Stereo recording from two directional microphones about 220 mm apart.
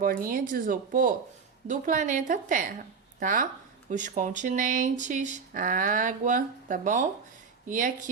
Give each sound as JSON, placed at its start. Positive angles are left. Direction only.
{"t": 0.0, "sound": "speech", "side_deg": -40}